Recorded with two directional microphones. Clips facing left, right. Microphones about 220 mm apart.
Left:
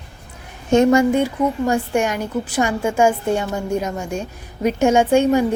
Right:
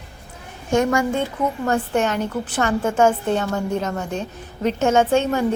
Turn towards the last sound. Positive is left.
turn(degrees=15)  # may be behind; listen again after turning